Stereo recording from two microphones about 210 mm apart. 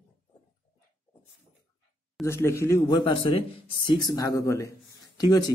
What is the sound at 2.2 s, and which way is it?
Speech, 10° left (ahead or behind).